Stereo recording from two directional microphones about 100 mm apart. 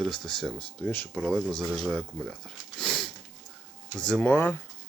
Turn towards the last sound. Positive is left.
turn(degrees=20)  # may be behind; listen again after turning